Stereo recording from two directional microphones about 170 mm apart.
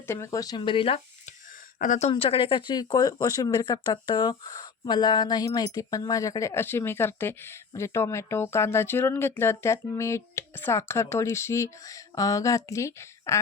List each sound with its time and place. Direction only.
0.1 s speech: 20° left (ahead or behind)